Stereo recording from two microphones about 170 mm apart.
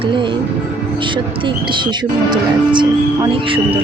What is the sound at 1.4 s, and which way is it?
Speech, 30° right (ahead or behind).